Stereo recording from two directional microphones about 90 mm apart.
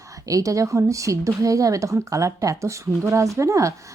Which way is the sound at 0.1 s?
40° right (ahead or behind).